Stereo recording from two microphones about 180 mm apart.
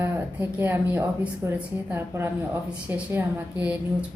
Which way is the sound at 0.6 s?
10° right (ahead or behind).